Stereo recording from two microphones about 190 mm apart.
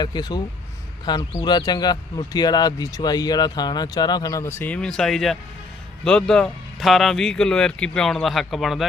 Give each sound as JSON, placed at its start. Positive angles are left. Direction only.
{"t": 0.0, "sound": "speech", "side_deg": 20}